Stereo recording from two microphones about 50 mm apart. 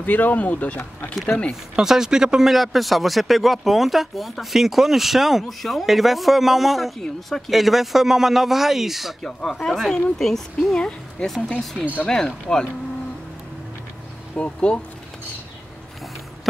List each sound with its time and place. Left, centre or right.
0.0 s speech: left
1.1 s speech: centre
1.8 s speech: centre
9.2 s speech: centre
10.8 s speech: centre
11.2 s speech: centre
12.5 s speech: centre
14.3 s speech: left